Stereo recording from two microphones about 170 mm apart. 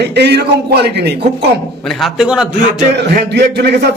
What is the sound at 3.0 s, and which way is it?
Speech, 75° right (ahead or behind).